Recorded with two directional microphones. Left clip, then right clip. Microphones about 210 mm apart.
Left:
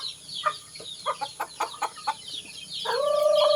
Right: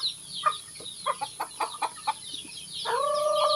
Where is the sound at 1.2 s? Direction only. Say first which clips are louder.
Left 1 dB; 35° left (ahead or behind).